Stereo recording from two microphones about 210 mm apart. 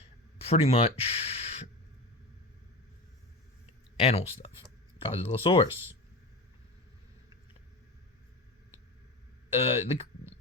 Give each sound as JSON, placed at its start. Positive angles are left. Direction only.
{"t": 0.4, "sound": "speech", "side_deg": 30}
{"t": 4.0, "sound": "speech", "side_deg": 30}
{"t": 9.5, "sound": "speech", "side_deg": 25}